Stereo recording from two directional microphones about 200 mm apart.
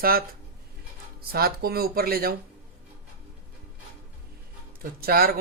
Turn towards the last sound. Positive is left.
turn(degrees=-50)  # may be behind; listen again after turning